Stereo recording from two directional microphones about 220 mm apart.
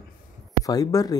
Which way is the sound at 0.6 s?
15° left (ahead or behind).